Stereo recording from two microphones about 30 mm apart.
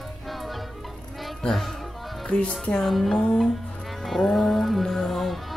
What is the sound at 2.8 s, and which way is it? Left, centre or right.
Speech, centre.